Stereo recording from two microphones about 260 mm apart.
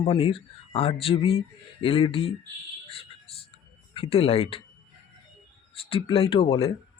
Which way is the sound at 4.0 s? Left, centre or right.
Left.